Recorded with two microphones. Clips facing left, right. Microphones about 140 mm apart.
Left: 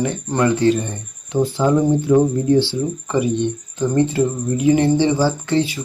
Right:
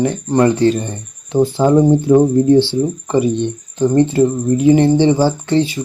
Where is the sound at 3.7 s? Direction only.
30° right (ahead or behind).